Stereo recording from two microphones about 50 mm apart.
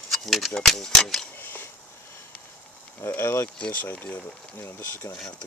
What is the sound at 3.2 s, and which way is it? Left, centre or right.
Speech, left.